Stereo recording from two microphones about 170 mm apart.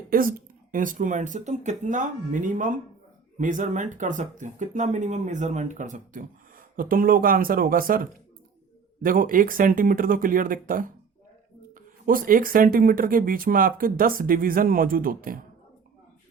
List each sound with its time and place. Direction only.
0.1 s speech: 55° right (ahead or behind)